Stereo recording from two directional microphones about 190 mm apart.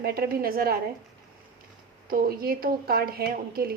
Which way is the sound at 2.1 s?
50° right (ahead or behind).